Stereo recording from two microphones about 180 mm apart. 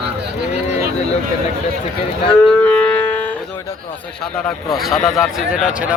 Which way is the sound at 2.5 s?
5° left (ahead or behind).